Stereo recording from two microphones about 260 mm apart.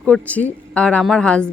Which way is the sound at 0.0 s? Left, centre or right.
Centre.